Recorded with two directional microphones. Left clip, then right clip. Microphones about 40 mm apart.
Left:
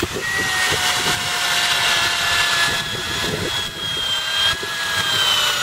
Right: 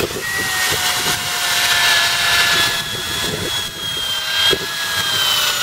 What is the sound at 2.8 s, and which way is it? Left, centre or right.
Vehicle, centre.